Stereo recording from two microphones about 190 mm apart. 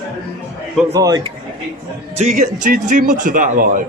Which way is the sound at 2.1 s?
40° right (ahead or behind).